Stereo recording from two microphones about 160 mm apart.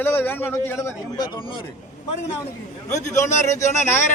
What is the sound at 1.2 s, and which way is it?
Speech, 30° left (ahead or behind).